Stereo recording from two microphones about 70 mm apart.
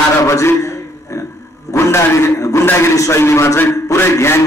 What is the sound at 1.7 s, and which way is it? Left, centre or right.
A man's voice, left.